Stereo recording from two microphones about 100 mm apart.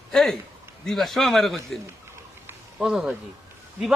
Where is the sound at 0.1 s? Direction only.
5° left (ahead or behind).